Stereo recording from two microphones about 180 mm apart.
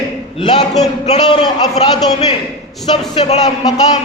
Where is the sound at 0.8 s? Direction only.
40° left (ahead or behind).